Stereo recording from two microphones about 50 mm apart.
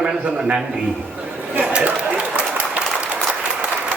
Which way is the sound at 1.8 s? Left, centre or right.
Right.